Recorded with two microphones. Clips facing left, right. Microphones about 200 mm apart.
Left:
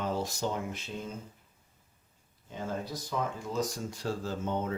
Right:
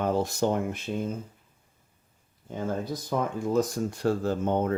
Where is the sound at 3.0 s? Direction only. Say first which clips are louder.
Right 8 dB; 55° right (ahead or behind).